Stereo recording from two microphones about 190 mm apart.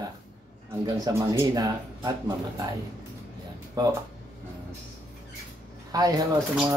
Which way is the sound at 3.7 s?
15° right (ahead or behind).